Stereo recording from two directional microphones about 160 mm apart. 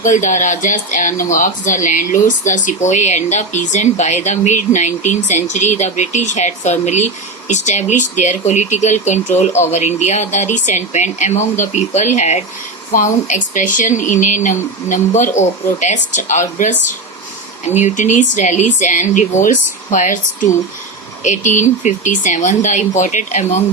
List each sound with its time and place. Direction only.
0.0 s speech: 50° left (ahead or behind)
17.7 s speech: 50° left (ahead or behind)
21.2 s speech: 50° left (ahead or behind)